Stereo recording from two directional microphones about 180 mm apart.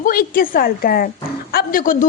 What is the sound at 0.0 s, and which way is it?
A woman's voice, 55° left (ahead or behind).